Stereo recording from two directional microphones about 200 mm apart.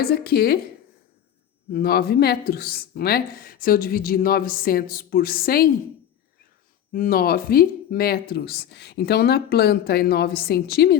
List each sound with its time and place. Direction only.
0.0 s a woman's voice: 50° left (ahead or behind)
1.7 s a woman's voice: 50° left (ahead or behind)
6.9 s a woman's voice: 45° left (ahead or behind)